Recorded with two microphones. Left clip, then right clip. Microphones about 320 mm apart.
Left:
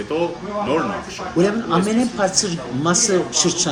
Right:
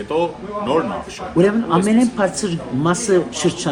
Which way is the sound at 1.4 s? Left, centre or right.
Right.